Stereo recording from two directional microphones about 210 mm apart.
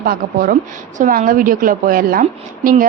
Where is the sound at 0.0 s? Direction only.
45° right (ahead or behind).